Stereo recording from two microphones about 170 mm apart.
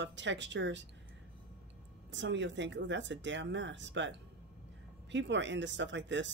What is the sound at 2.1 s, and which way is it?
Speech, 90° right.